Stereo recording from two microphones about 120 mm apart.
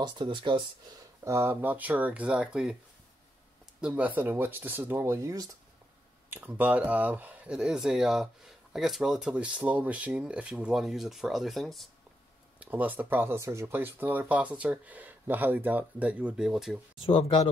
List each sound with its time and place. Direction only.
0.0 s speech: 40° right (ahead or behind)
1.2 s speech: 20° right (ahead or behind)
3.8 s speech: 10° right (ahead or behind)
6.3 s speech: 15° right (ahead or behind)
12.5 s speech: 15° right (ahead or behind)
17.0 s speech: 50° left (ahead or behind)